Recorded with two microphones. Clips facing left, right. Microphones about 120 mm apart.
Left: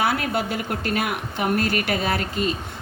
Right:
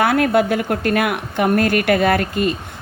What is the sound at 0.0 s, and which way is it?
A woman's voice, 55° right (ahead or behind).